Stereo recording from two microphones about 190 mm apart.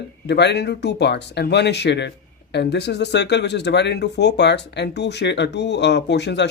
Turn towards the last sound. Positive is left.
turn(degrees=65)  # may be behind; listen again after turning